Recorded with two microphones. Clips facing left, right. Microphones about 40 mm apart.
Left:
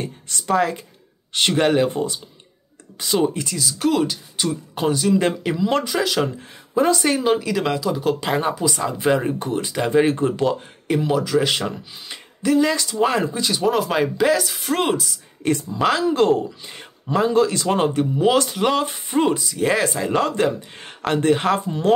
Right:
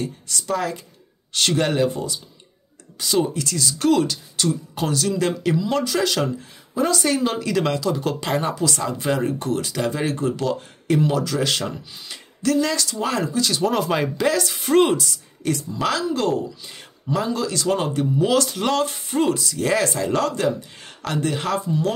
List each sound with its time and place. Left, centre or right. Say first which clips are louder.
0.0 s speech: right 1 dB; left
3.5 s speech: right 4 dB; centre
6.8 s speech: left 2 dB; left
10.9 s speech: left 1 dB; centre
13.6 s speech: left 3 dB; centre
15.7 s speech: left 4 dB; left